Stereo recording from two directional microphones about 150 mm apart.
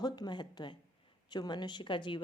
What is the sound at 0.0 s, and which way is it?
A woman's voice, 30° left (ahead or behind).